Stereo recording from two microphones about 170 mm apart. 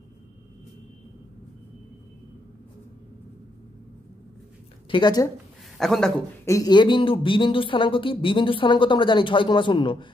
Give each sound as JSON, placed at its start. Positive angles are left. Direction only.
{"t": 4.8, "sound": "a woman's voice", "side_deg": 25}
{"t": 5.8, "sound": "speech", "side_deg": 0}
{"t": 6.4, "sound": "speech", "side_deg": 20}